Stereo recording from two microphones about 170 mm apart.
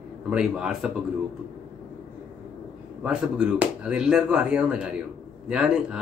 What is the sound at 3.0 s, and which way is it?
Speech, 5° right (ahead or behind).